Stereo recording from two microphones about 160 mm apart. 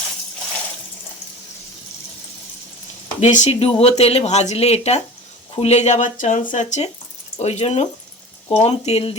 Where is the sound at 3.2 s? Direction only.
50° left (ahead or behind).